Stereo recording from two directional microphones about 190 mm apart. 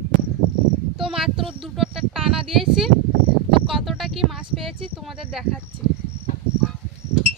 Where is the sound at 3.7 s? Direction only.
Centre (ahead or behind).